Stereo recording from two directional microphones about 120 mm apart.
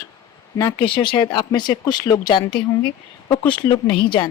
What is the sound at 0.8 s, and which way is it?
Speech, 45° left (ahead or behind).